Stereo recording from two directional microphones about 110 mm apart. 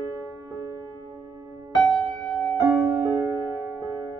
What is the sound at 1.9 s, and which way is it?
Music, 5° left (ahead or behind).